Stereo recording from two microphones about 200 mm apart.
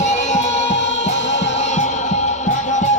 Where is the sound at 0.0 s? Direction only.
35° left (ahead or behind).